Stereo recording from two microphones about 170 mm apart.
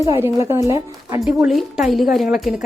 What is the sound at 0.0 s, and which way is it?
A woman's voice, 20° right (ahead or behind).